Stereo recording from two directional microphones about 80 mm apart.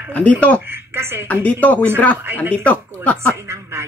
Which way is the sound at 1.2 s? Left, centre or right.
Centre.